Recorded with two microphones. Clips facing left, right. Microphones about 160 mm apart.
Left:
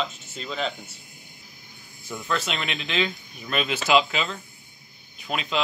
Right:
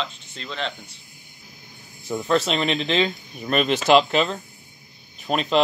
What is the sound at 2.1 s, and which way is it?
Speech, 40° right (ahead or behind).